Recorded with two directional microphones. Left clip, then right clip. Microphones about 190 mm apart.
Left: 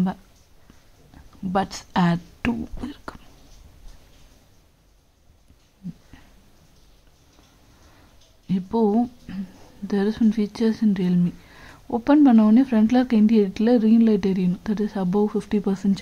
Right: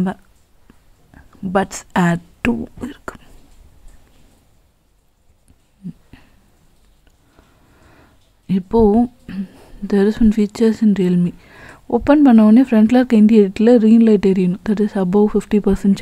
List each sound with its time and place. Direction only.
1.1 s speech: 35° right (ahead or behind)
6.1 s a sound: 35° right (ahead or behind)
8.5 s speech: 40° right (ahead or behind)